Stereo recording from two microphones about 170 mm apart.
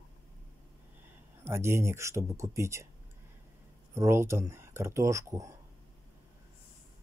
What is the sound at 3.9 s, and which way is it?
Speech, 15° right (ahead or behind).